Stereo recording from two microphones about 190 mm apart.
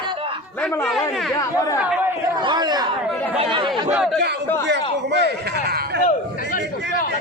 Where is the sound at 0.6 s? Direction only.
Centre (ahead or behind).